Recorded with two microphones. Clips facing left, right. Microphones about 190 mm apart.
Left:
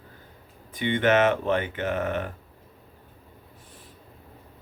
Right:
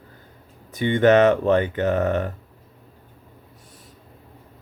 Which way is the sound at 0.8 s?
45° right (ahead or behind).